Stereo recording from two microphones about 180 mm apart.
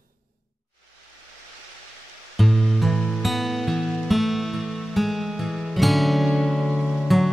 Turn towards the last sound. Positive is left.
turn(degrees=0)  # may be behind; listen again after turning